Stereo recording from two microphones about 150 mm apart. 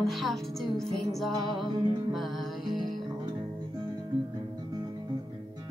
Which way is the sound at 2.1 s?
Centre (ahead or behind).